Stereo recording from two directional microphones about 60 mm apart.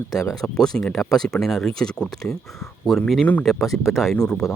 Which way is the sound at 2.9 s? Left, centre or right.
Centre.